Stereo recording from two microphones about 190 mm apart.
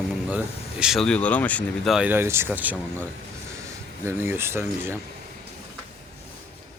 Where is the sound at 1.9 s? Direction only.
10° right (ahead or behind).